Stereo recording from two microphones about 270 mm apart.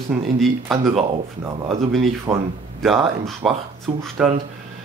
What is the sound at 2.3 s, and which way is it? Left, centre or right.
Speech, centre.